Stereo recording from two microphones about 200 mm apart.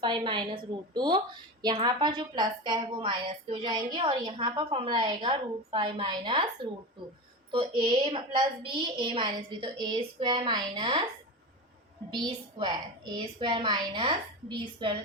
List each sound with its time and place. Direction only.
0.0 s a woman's voice: 25° right (ahead or behind)
7.5 s a woman's voice: 25° right (ahead or behind)
12.2 s a woman's voice: 25° right (ahead or behind)